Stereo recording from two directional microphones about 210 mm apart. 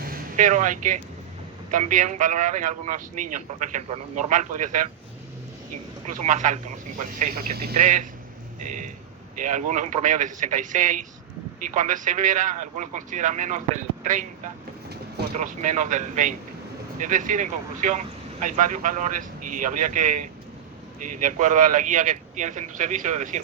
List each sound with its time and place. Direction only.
0.1 s a man's voice: 35° right (ahead or behind)
6.1 s a man's voice: 35° right (ahead or behind)
21.2 s a man's voice: 35° right (ahead or behind)